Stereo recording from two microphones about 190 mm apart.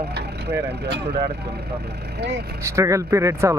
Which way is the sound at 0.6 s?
60° right (ahead or behind).